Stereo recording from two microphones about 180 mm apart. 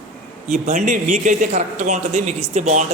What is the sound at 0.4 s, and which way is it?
A man's voice, 40° right (ahead or behind).